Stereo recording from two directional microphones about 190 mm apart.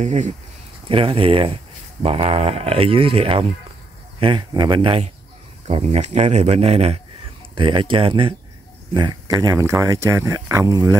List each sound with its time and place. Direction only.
0.0 s speech: 40° right (ahead or behind); by 11.0 s 20° right (ahead or behind)